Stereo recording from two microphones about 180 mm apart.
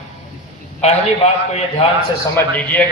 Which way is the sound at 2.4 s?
10° left (ahead or behind).